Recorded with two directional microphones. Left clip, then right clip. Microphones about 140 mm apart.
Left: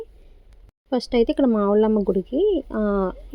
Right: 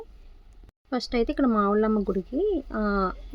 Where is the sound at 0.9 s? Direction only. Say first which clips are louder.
Left 6 dB; 25° left (ahead or behind).